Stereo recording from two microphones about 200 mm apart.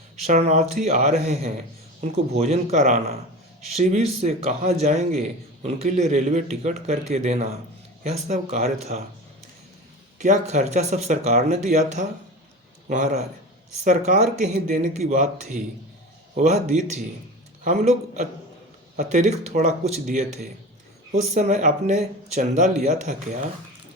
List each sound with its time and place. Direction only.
0.3 s speech: 35° right (ahead or behind)
10.2 s speech: 40° right (ahead or behind)
13.8 s a man's voice: 40° right (ahead or behind)